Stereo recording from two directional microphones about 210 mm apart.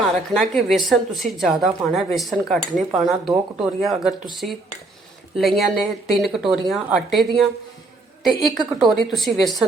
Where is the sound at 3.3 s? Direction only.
Centre (ahead or behind).